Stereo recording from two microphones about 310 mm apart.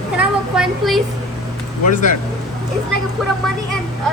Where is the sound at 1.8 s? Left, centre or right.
Left.